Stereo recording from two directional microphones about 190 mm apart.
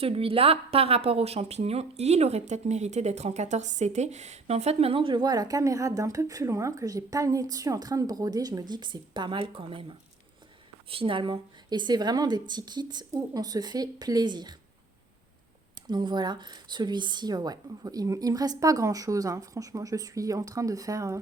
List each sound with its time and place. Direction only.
0.0 s a woman's voice: 30° right (ahead or behind)
10.8 s a woman's voice: 30° right (ahead or behind)
15.9 s a woman's voice: 25° right (ahead or behind)